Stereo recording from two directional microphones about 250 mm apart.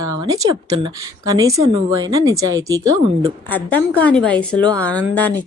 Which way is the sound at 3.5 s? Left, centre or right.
Centre.